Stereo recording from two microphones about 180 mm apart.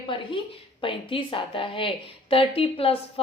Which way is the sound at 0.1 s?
30° left (ahead or behind).